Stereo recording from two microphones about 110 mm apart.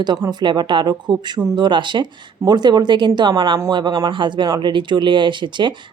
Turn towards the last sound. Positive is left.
turn(degrees=-45)  # may be behind; listen again after turning